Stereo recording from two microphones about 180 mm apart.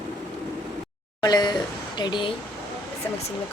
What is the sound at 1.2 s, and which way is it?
Speech, 25° left (ahead or behind).